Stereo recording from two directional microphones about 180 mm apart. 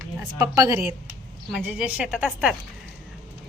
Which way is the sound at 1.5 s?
5° right (ahead or behind).